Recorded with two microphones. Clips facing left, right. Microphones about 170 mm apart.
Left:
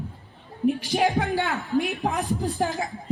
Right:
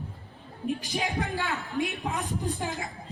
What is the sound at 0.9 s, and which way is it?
Speech, 75° left (ahead or behind).